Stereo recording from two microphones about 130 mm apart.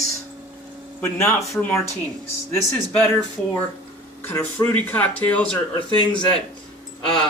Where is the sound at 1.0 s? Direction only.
20° left (ahead or behind).